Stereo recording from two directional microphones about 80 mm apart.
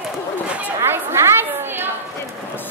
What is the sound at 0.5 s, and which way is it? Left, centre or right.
Chatter, centre.